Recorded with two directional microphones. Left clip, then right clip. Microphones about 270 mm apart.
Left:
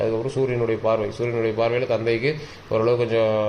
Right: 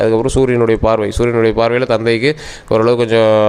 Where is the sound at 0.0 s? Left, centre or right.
Right.